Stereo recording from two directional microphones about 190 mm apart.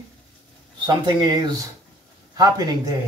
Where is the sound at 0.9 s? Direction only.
25° right (ahead or behind).